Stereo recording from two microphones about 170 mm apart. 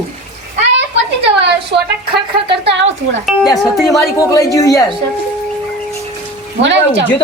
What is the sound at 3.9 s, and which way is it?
Speech, 20° left (ahead or behind).